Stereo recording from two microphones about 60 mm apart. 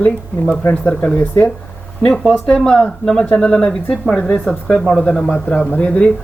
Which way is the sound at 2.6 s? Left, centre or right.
Centre.